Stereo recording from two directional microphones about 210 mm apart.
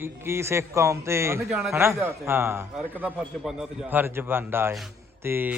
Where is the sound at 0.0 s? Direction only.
10° right (ahead or behind).